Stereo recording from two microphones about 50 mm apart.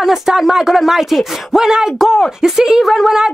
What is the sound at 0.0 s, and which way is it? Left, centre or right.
Speech, centre.